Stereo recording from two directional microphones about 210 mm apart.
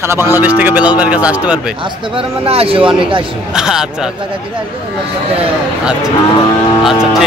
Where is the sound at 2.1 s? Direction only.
25° right (ahead or behind).